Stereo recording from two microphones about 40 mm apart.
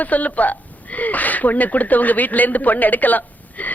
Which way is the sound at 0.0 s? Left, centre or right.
Left.